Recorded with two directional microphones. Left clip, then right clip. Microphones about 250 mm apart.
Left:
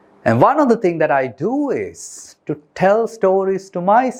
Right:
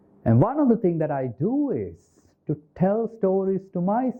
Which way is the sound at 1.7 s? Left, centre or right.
Centre.